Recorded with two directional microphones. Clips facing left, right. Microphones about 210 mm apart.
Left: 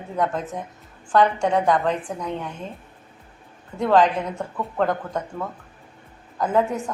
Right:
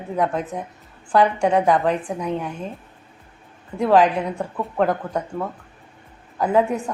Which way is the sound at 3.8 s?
10° right (ahead or behind).